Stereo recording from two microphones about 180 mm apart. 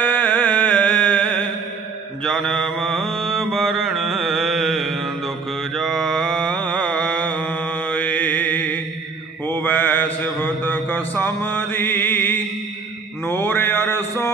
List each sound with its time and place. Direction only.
0.0 s music: 5° left (ahead or behind)
2.2 s mantra: centre (ahead or behind)